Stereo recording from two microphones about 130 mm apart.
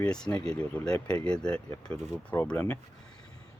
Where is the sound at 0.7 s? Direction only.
10° left (ahead or behind).